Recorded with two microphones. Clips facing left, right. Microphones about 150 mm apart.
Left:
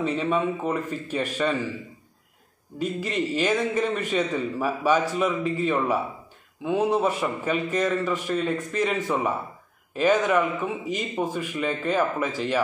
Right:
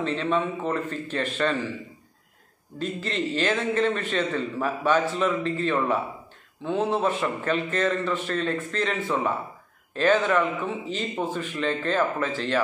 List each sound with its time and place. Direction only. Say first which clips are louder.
0.0 s a man's voice: left 1 dB; 10° left (ahead or behind)
2.8 s a man's voice: left 2 dB; 10° left (ahead or behind)